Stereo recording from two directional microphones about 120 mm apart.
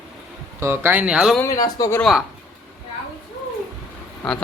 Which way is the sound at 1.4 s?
30° left (ahead or behind).